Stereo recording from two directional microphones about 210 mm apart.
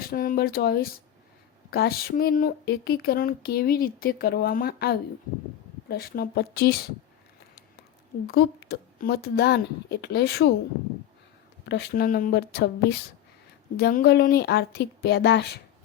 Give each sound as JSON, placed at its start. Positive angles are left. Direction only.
{"t": 0.0, "sound": "speech", "side_deg": 45}
{"t": 8.3, "sound": "speech", "side_deg": 50}
{"t": 11.6, "sound": "speech", "side_deg": 55}
{"t": 13.7, "sound": "speech", "side_deg": 45}